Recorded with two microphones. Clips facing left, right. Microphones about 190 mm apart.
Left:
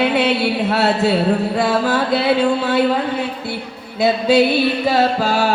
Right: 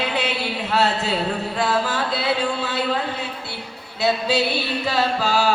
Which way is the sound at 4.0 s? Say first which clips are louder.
Left 7 dB; 50° left (ahead or behind).